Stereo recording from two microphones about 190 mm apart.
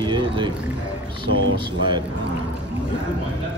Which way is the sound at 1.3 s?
90° right.